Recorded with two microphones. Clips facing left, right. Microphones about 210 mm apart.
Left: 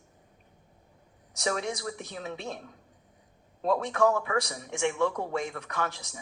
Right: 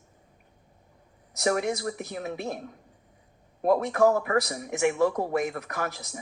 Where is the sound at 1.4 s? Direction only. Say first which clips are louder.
Right 5 dB; 55° right (ahead or behind).